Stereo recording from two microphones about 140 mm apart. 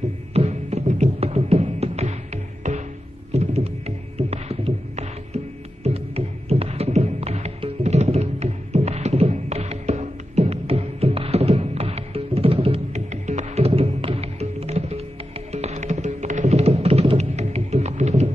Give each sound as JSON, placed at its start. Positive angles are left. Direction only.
{"t": 0.3, "sound": "music", "side_deg": -50}